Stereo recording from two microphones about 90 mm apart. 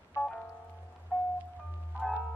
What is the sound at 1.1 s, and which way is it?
Music, 15° left (ahead or behind).